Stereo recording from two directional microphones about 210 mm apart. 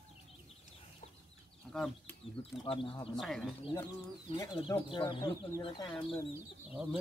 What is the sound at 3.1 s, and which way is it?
Speech, centre (ahead or behind).